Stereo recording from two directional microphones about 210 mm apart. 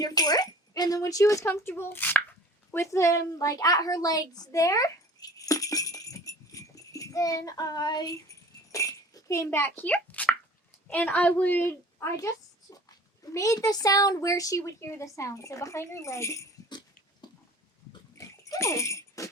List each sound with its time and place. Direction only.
0.0 s a woman's voice: 20° left (ahead or behind)
13.3 s speech: 15° left (ahead or behind)
18.2 s dog: 15° left (ahead or behind)